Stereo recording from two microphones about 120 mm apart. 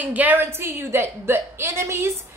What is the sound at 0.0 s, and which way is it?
A woman's voice, 15° right (ahead or behind).